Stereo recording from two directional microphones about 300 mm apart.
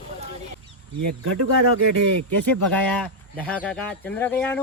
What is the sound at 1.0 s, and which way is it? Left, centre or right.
Speech, right.